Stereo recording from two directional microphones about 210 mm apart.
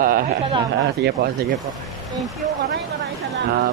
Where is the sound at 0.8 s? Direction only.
50° right (ahead or behind).